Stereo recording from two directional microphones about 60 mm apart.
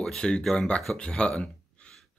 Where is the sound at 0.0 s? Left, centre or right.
Centre.